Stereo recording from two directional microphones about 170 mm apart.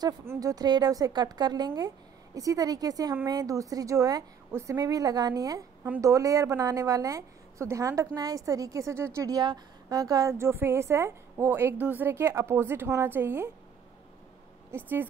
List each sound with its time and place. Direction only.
0.0 s a woman's voice: 15° right (ahead or behind)
14.7 s a woman's voice: 15° right (ahead or behind)